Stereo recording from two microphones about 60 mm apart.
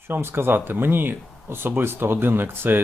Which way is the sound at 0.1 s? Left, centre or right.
Right.